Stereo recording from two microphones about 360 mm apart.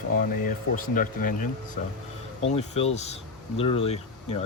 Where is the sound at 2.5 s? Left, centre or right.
Centre.